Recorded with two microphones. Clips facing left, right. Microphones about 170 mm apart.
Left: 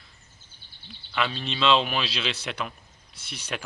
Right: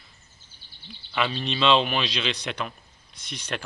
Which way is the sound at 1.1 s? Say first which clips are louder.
Right 2 dB; centre (ahead or behind).